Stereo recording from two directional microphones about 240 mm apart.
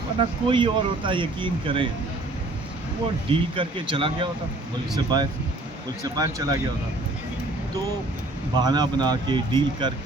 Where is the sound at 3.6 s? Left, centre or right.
Right.